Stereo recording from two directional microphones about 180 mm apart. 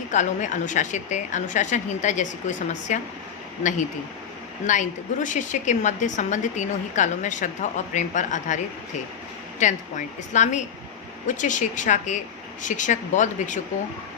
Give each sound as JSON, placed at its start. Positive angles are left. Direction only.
{"t": 0.1, "sound": "a woman's voice", "side_deg": 45}
{"t": 4.6, "sound": "a woman's voice", "side_deg": 45}